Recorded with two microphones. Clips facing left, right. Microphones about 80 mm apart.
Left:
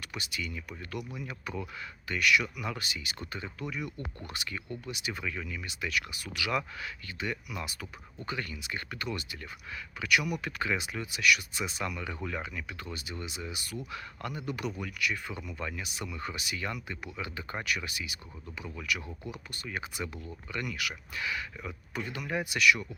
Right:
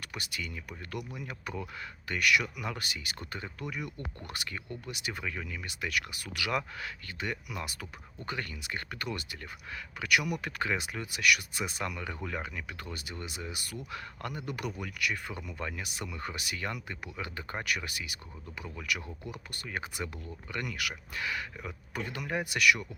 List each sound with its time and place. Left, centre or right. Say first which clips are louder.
0.0 s speech: left 1 dB; right
11.9 s speech: left 1 dB; right